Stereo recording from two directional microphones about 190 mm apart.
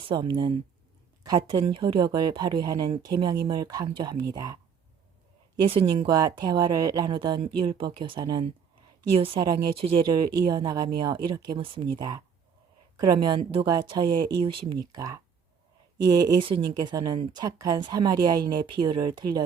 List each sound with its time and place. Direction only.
0.0 s speech: 25° right (ahead or behind)
5.6 s speech: 30° right (ahead or behind)
16.2 s speech: 25° right (ahead or behind)